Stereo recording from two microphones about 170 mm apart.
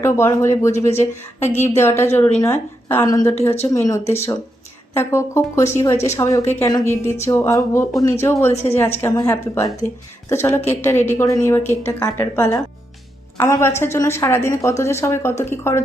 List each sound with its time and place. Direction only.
0.0 s a woman's voice: 15° left (ahead or behind)